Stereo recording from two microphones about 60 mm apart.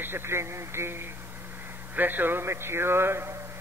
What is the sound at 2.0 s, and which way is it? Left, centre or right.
A man's voice, right.